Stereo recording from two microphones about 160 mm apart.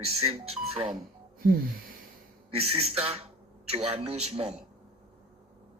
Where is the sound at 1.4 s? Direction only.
65° right (ahead or behind).